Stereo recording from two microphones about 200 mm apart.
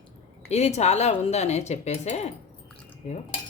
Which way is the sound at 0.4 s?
35° left (ahead or behind).